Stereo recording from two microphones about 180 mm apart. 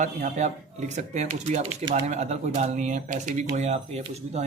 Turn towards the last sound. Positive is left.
turn(degrees=-35)  # may be behind; listen again after turning